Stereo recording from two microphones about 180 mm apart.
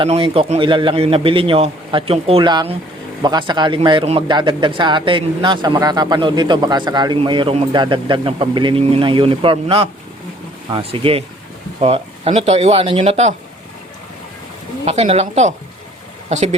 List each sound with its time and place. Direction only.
0.0 s speech: 30° right (ahead or behind)
14.8 s speech: 35° right (ahead or behind)